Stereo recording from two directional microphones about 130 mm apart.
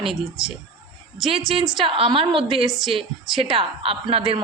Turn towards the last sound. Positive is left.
turn(degrees=-45)  # may be behind; listen again after turning